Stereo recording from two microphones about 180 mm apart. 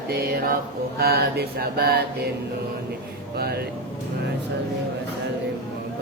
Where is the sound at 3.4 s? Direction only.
60° right (ahead or behind).